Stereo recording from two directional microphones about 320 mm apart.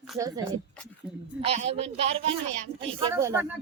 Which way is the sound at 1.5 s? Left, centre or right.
Centre.